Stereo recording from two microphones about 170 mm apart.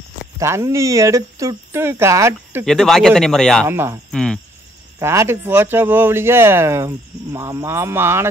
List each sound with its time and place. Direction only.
0.4 s speech: 15° right (ahead or behind)
2.6 s speech: centre (ahead or behind)
3.6 s speech: 15° right (ahead or behind)
4.1 s cricket: 5° left (ahead or behind)
4.9 s speech: 15° right (ahead or behind)